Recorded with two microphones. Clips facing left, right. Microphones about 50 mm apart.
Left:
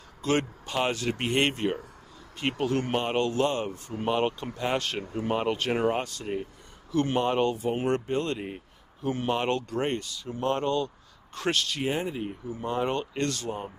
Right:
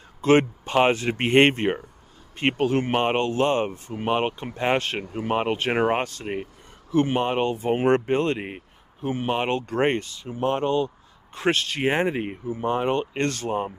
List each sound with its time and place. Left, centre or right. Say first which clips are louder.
0.2 s speech: right 8 dB; right
7.6 s speech: right 6 dB; right
9.1 s speech: right 3 dB; right
9.7 s speech: right 6 dB; right
10.3 s speech: right 4 dB; right
11.8 s speech: right 6 dB; right
12.4 s speech: right 5 dB; right
13.2 s speech: right 5 dB; right